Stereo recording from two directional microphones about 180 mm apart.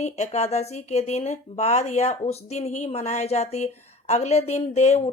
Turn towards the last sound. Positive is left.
turn(degrees=40)  # may be behind; listen again after turning